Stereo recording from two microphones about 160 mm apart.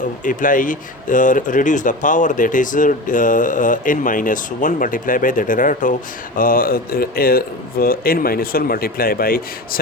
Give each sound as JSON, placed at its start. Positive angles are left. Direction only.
{"t": 0.3, "sound": "speech", "side_deg": 55}